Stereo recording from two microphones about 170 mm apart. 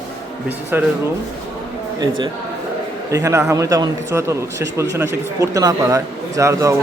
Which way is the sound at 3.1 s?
20° right (ahead or behind).